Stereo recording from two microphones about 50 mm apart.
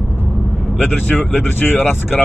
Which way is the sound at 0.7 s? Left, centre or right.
Left.